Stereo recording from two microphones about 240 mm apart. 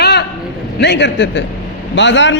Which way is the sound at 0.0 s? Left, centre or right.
Left.